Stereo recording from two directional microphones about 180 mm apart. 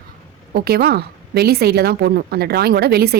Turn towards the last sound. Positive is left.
turn(degrees=-60)  # may be behind; listen again after turning